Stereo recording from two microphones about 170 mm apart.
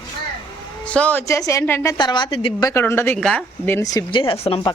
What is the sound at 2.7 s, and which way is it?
Speech, 15° left (ahead or behind).